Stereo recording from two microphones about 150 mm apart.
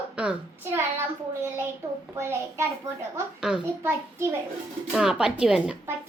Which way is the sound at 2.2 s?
15° right (ahead or behind).